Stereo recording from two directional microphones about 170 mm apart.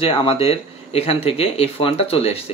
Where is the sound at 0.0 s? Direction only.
30° left (ahead or behind).